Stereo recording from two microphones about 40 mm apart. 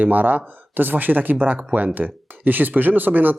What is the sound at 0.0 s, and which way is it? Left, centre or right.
Speech, right.